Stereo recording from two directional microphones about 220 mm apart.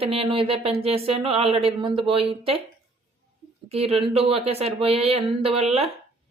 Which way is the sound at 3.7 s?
25° right (ahead or behind).